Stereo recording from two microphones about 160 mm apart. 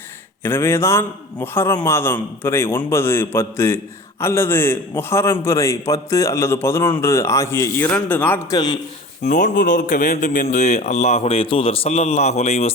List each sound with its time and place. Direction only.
0.4 s a man's voice: 15° left (ahead or behind)
8.5 s speech: 25° left (ahead or behind)
9.2 s a man's voice: 50° left (ahead or behind)